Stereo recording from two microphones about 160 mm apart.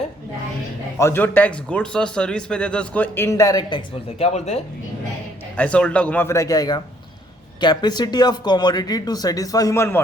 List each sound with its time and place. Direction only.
0.9 s a man's voice: 15° left (ahead or behind)
4.3 s speech: 40° left (ahead or behind)
5.5 s a man's voice: 10° left (ahead or behind)